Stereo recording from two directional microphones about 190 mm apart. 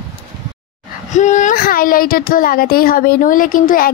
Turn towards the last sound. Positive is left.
turn(degrees=45)  # may be behind; listen again after turning